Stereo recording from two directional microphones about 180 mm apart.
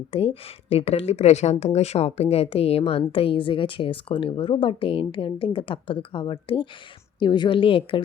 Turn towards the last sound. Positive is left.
turn(degrees=30)  # may be behind; listen again after turning